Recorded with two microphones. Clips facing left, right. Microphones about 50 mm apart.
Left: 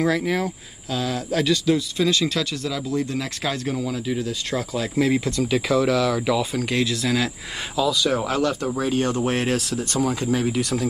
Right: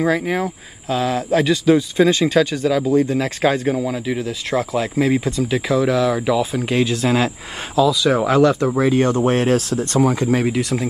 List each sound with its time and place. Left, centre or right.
0.0 s speech: centre; by 7.2 s right
7.7 s speech: centre
8.1 s speech: right
10.6 s speech: right